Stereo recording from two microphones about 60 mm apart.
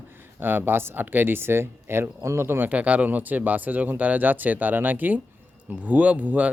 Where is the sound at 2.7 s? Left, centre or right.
Right.